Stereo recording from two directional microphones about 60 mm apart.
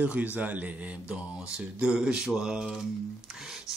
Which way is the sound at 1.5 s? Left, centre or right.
Centre.